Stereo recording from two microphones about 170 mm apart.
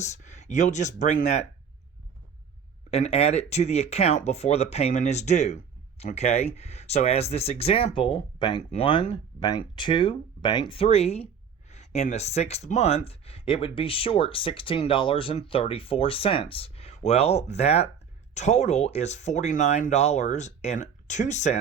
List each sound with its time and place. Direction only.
0.0 s speech: 45° left (ahead or behind)
2.9 s speech: 35° left (ahead or behind)